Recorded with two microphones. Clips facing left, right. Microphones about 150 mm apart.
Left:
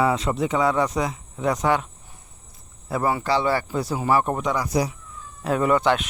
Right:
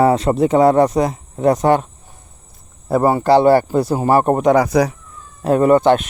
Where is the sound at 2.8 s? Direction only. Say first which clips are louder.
Right 9 dB; 45° right (ahead or behind); by 4.9 s 60° right (ahead or behind).